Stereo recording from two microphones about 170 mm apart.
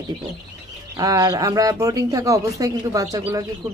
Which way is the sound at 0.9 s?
20° right (ahead or behind).